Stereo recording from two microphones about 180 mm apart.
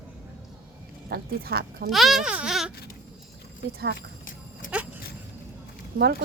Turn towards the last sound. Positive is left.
turn(degrees=-60)  # may be behind; listen again after turning